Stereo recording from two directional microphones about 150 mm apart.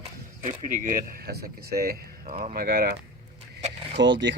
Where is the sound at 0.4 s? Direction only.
60° right (ahead or behind); by 2.3 s 85° right.